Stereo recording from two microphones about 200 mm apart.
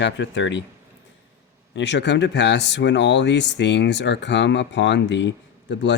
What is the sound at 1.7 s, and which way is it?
Speech, 60° left (ahead or behind).